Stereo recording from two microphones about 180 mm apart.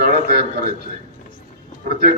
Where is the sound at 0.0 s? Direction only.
60° right (ahead or behind).